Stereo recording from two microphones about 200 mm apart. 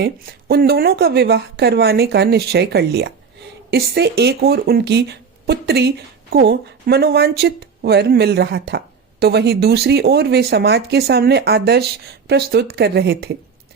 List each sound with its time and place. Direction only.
0.0 s speech: 50° right (ahead or behind)